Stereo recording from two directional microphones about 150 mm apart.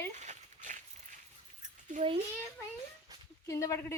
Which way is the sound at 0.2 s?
55° right (ahead or behind).